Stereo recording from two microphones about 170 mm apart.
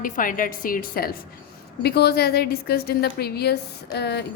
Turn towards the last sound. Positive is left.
turn(degrees=80)